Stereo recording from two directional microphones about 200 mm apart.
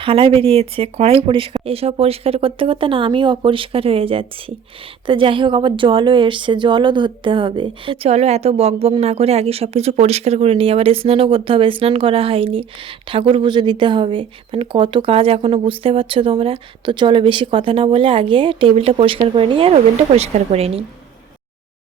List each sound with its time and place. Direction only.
0.0 s a woman's voice: 25° right (ahead or behind)